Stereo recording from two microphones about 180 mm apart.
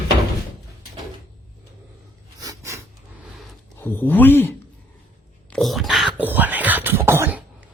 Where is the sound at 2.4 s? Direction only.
20° right (ahead or behind).